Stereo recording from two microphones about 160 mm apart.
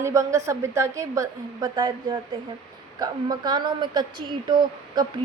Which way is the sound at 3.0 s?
25° right (ahead or behind).